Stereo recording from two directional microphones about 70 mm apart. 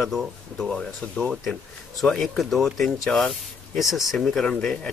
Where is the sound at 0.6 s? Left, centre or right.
Centre.